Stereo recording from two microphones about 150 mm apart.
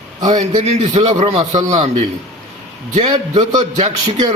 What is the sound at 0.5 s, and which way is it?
Speech, 50° right (ahead or behind).